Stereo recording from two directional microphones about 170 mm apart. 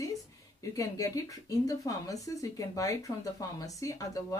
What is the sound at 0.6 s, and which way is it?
Speech, 20° left (ahead or behind).